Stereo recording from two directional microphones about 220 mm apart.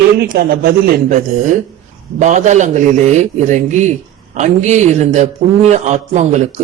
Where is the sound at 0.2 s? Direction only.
45° right (ahead or behind).